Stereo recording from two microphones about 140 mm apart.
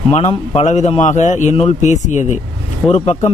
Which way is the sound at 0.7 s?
55° left (ahead or behind).